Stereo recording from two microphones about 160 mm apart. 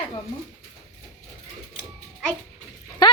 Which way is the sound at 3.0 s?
30° left (ahead or behind).